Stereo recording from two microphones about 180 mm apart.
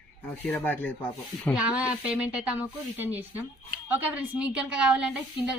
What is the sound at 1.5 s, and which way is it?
Speech, 5° right (ahead or behind).